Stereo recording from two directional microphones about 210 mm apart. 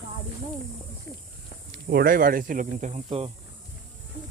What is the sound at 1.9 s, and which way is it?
Speech, 45° right (ahead or behind).